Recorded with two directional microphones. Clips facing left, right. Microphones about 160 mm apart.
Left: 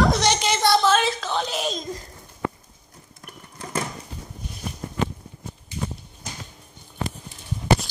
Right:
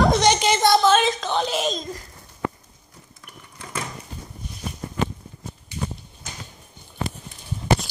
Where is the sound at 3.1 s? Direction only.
40° left (ahead or behind).